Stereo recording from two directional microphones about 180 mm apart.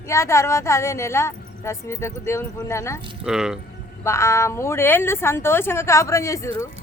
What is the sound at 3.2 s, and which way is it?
Speech, 5° right (ahead or behind).